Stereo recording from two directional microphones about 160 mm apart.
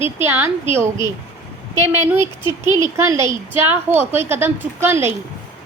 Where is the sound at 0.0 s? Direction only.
15° right (ahead or behind).